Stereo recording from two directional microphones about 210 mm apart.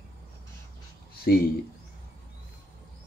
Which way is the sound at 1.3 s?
50° left (ahead or behind).